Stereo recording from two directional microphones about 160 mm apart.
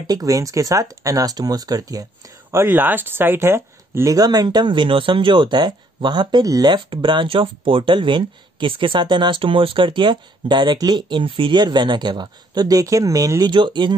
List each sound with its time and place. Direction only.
0.0 s speech: 25° right (ahead or behind)